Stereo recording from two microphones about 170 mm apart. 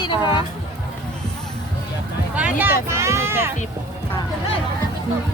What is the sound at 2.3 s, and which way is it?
Speech, 10° right (ahead or behind).